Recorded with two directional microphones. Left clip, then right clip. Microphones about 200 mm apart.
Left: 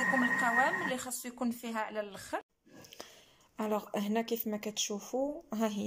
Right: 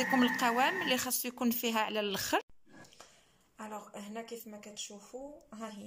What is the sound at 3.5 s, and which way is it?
Speech, 40° left (ahead or behind).